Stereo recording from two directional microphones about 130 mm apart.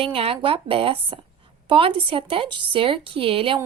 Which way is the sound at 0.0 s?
45° right (ahead or behind).